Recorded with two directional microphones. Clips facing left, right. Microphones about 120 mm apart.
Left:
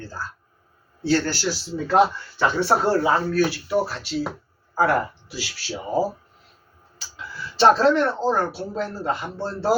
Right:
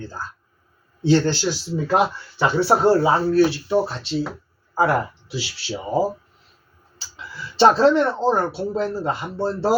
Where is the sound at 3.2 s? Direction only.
25° right (ahead or behind).